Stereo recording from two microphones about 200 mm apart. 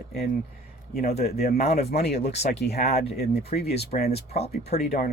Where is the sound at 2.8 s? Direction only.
35° left (ahead or behind).